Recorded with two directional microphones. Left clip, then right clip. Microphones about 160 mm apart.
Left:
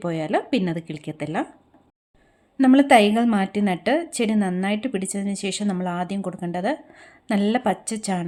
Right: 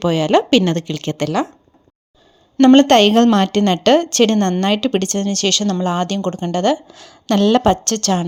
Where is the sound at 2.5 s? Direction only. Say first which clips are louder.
Right 5 dB; 35° right (ahead or behind).